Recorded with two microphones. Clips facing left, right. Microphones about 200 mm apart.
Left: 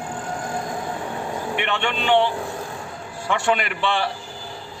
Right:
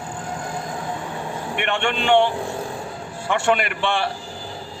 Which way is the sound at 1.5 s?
50° right (ahead or behind).